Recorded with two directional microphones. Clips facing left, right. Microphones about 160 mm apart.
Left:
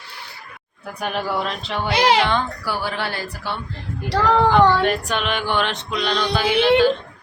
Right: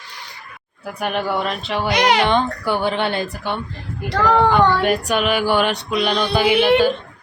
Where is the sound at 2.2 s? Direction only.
20° right (ahead or behind).